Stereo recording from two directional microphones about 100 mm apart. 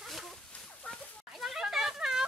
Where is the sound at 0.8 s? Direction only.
15° left (ahead or behind).